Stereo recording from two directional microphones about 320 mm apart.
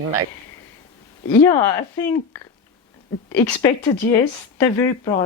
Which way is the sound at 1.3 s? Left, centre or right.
Centre.